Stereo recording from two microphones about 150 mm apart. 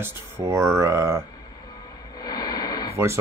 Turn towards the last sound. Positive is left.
turn(degrees=-15)  # may be behind; listen again after turning